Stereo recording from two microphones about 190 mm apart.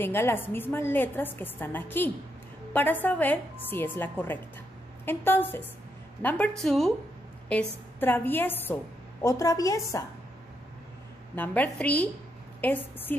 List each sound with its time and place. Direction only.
0.0 s a woman's voice: 10° left (ahead or behind)
11.3 s a woman's voice: 10° left (ahead or behind)